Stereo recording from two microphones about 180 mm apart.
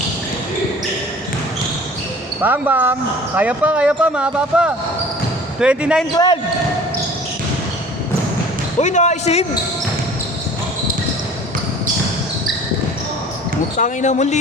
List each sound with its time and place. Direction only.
2.4 s speech: 10° right (ahead or behind)
6.1 s speech: 25° left (ahead or behind)
8.8 s speech: 40° left (ahead or behind)
13.7 s speech: 45° left (ahead or behind)